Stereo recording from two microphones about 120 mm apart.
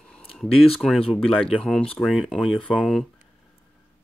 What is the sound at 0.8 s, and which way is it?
Speech, centre (ahead or behind).